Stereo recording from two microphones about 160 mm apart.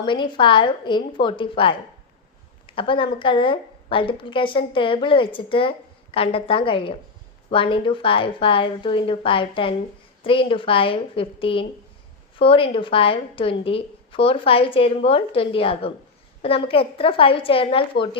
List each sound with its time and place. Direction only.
0.0 s a woman's voice: 30° left (ahead or behind)